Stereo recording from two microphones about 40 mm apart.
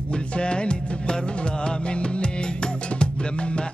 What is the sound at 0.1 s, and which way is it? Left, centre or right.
Music, left.